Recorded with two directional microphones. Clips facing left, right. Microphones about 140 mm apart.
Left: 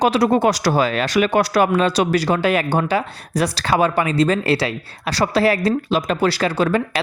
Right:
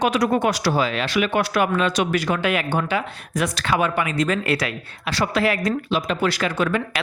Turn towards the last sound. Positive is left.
turn(degrees=35)  # may be behind; listen again after turning